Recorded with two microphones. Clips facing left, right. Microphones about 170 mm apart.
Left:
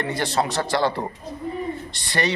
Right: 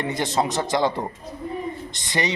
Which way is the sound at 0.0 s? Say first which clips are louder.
Even; 20° right (ahead or behind).